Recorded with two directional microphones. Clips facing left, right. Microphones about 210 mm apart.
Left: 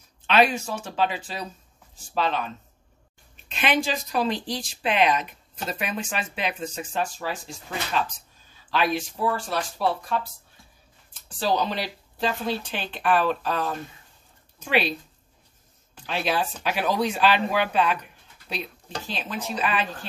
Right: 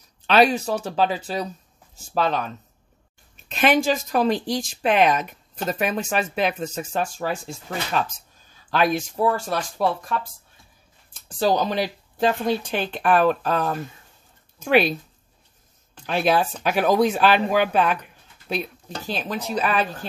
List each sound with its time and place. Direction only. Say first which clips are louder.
0.3 s speech: right 3 dB; 35° right (ahead or behind)
8.6 s speech: right 3 dB; 45° right (ahead or behind)
11.3 s speech: right 4 dB; 45° right (ahead or behind)
16.1 s speech: right 5 dB; 50° right (ahead or behind)
19.0 s speech: right 5 dB; 40° right (ahead or behind)